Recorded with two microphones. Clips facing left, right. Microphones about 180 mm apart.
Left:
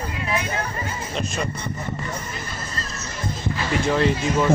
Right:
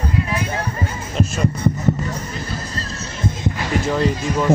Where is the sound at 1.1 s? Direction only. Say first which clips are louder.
Right 5 dB; centre (ahead or behind).